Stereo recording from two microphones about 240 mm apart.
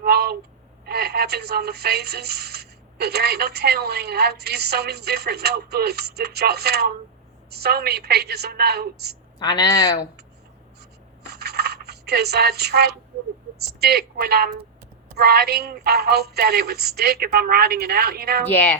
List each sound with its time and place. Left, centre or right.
0.0 s a sound: right
0.9 s speech: right
9.4 s speech: centre
11.3 s coin: right
13.7 s speech: right
18.4 s speech: centre